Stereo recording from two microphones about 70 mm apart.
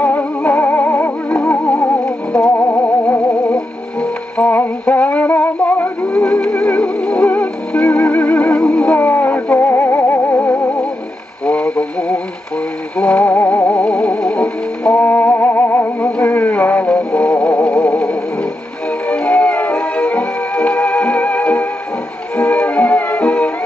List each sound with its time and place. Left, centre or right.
0.0 s music: left
2.0 s music: centre
2.7 s music: left
3.5 s music: centre
4.5 s synthetic singing: left
6.0 s music: centre
11.4 s radio: centre
12.9 s music: centre